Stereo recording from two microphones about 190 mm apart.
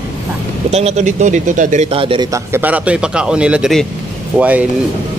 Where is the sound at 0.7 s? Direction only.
35° right (ahead or behind).